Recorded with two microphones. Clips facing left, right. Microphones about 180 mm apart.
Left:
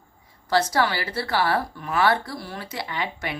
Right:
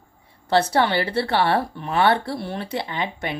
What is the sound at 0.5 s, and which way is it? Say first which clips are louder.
Speech: right 3 dB; 25° right (ahead or behind).